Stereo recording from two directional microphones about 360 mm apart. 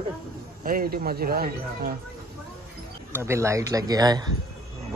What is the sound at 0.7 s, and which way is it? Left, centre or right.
Speech, right.